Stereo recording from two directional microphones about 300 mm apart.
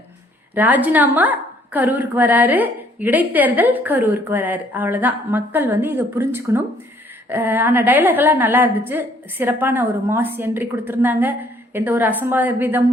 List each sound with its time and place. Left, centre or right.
0.5 s a woman's voice: centre